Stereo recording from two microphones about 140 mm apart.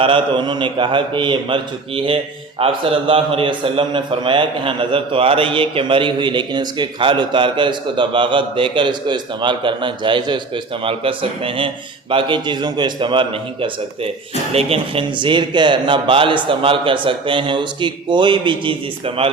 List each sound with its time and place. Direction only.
0.0 s a man's voice: 35° right (ahead or behind)